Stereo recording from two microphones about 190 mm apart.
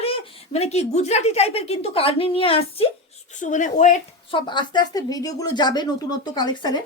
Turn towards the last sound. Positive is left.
turn(degrees=20)  # may be behind; listen again after turning